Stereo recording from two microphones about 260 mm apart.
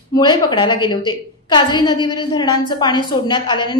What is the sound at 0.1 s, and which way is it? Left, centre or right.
A woman's voice, centre.